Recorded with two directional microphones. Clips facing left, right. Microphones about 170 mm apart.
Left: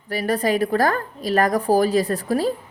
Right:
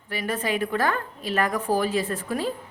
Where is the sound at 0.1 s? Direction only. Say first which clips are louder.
Left 6 dB; 35° left (ahead or behind).